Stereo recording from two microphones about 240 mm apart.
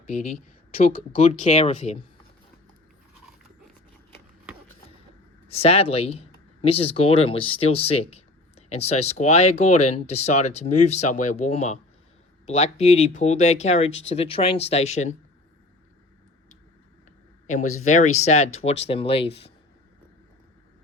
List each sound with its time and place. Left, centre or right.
0.1 s speech: left
5.5 s speech: left
17.4 s a sound: left
17.8 s speech: left